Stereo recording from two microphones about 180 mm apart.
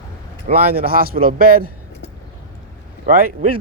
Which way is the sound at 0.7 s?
55° right (ahead or behind).